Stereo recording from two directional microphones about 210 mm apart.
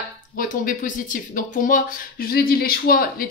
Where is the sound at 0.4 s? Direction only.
40° left (ahead or behind).